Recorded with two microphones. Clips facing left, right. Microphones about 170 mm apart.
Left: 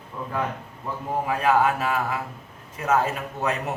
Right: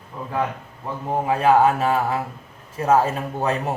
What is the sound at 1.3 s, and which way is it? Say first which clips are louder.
A man's voice: right 5 dB; 30° right (ahead or behind).